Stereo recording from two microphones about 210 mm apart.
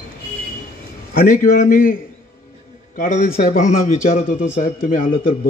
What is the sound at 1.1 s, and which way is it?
Speech, 40° left (ahead or behind).